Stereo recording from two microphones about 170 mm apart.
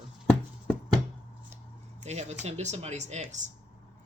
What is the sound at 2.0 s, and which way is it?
Speech, 40° right (ahead or behind).